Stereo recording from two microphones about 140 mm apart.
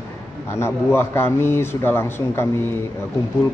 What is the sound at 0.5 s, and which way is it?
Speech, 15° left (ahead or behind).